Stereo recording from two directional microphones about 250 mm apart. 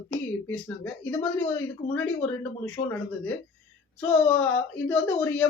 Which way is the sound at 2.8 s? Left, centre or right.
Left.